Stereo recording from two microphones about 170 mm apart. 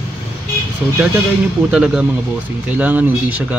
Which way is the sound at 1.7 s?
5° right (ahead or behind).